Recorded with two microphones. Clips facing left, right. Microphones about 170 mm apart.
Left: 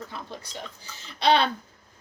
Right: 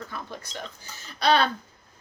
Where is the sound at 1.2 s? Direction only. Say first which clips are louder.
Even; 25° left (ahead or behind).